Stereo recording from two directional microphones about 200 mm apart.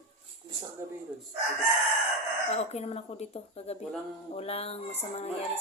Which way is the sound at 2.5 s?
30° left (ahead or behind).